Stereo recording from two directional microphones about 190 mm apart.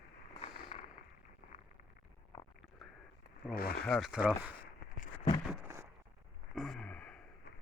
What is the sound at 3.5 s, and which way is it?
Speech, 55° left (ahead or behind).